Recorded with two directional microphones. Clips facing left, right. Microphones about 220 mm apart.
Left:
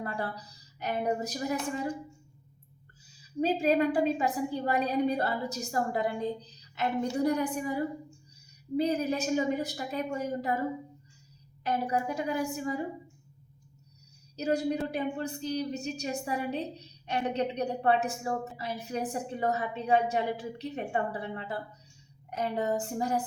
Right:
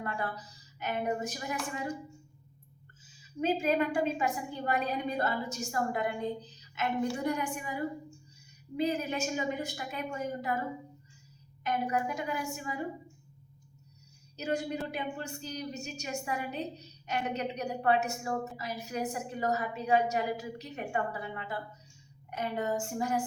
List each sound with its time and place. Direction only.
0.0 s a woman's voice: 35° left (ahead or behind)
3.4 s a woman's voice: 35° left (ahead or behind)
7.2 s a woman's voice: 35° left (ahead or behind)
11.6 s a woman's voice: 35° left (ahead or behind)
14.3 s a woman's voice: 35° left (ahead or behind)